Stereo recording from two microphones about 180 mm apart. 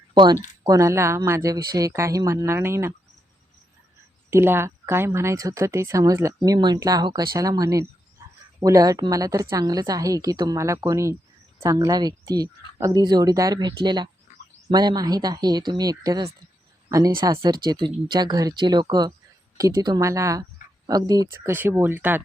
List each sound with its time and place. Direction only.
0.1 s speech: 25° right (ahead or behind)
4.3 s speech: 15° right (ahead or behind)
8.2 s a sound: 15° right (ahead or behind)
8.6 s a woman's voice: 20° right (ahead or behind)